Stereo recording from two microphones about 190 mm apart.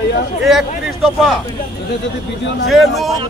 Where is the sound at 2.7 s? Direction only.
Centre (ahead or behind).